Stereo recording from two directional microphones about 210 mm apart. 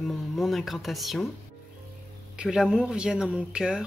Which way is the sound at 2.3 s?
5° right (ahead or behind).